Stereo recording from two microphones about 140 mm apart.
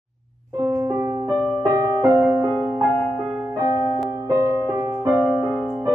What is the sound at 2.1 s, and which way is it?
Music, 10° right (ahead or behind).